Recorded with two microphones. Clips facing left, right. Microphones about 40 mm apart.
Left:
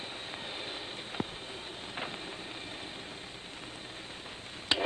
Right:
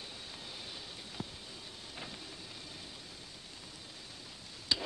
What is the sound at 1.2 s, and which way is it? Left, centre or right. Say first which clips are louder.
Vehicle: left 8 dB; left.